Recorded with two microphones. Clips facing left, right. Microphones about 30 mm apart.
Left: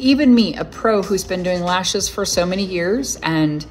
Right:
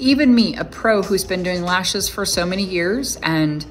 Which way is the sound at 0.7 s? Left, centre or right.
Centre.